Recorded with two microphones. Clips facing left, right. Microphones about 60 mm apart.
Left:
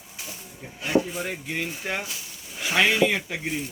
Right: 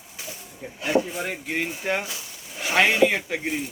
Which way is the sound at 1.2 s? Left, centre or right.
Right.